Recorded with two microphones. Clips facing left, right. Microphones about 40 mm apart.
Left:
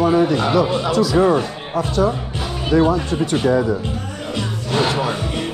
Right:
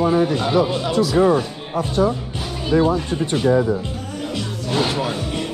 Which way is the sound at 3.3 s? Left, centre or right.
Left.